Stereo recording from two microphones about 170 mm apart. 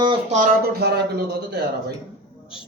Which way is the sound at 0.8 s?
75° right (ahead or behind).